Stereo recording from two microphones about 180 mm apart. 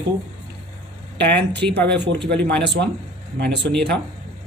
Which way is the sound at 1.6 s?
5° left (ahead or behind).